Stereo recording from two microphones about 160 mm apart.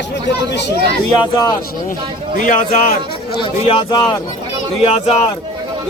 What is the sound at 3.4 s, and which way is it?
Speech, 30° left (ahead or behind).